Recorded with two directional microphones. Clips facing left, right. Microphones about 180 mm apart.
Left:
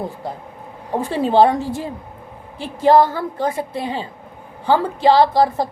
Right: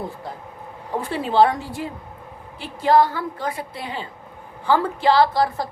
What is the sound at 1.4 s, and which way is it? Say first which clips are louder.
Speech: left 2 dB; 25° left (ahead or behind).